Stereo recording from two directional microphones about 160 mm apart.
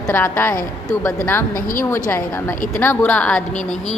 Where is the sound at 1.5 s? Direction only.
60° left (ahead or behind).